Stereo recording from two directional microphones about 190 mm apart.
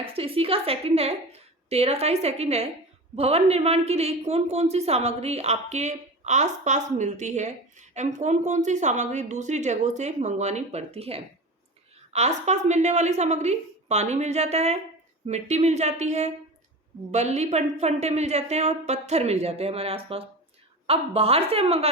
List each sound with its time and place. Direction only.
0.0 s a woman's voice: 30° right (ahead or behind)